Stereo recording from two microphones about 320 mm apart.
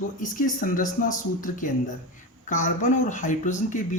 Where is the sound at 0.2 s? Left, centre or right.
Left.